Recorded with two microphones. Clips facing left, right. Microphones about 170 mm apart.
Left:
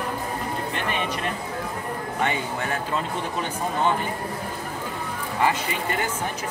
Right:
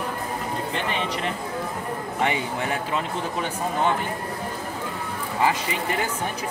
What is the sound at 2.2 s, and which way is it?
Speech, 20° right (ahead or behind).